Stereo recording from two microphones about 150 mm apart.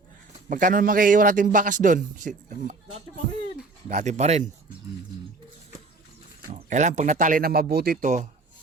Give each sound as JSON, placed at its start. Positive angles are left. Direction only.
{"t": 0.4, "sound": "a man's voice", "side_deg": -65}
{"t": 6.5, "sound": "a man's voice", "side_deg": -55}
{"t": 8.0, "sound": "speech", "side_deg": -55}